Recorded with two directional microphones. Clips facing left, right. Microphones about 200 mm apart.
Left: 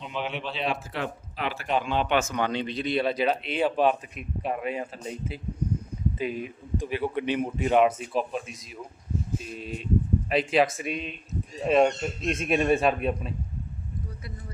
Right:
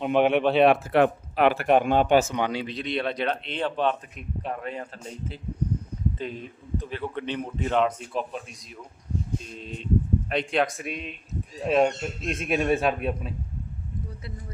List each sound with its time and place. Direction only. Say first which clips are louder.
0.0 s speech: right 12 dB; 60° right (ahead or behind)
2.4 s a man's voice: even; 5° right (ahead or behind)